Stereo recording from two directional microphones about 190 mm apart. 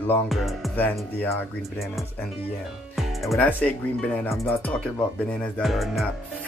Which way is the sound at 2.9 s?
Centre (ahead or behind).